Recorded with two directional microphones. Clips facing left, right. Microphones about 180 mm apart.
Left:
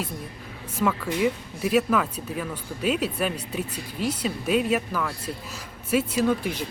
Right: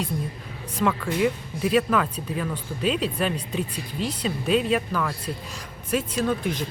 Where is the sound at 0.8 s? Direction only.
5° left (ahead or behind).